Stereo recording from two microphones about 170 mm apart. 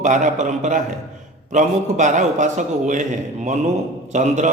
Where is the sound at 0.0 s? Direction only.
45° right (ahead or behind).